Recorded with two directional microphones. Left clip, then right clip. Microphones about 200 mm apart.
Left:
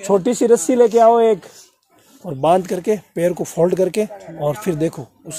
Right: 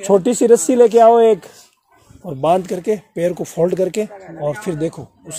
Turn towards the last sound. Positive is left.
turn(degrees=15)  # may be behind; listen again after turning